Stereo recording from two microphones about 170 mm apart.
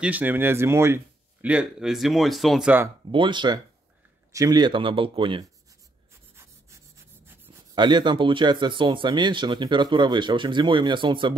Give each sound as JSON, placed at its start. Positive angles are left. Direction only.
{"t": 0.0, "sound": "speech", "side_deg": -10}
{"t": 3.1, "sound": "speech", "side_deg": -30}
{"t": 6.3, "sound": "rub", "side_deg": -15}
{"t": 7.7, "sound": "speech", "side_deg": -25}